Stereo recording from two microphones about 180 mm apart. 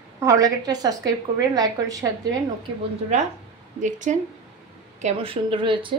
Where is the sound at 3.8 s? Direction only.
45° right (ahead or behind); by 5.9 s 30° right (ahead or behind).